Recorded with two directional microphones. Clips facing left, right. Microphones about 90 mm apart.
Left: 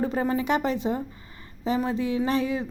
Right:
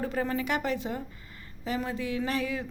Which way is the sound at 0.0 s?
25° left (ahead or behind).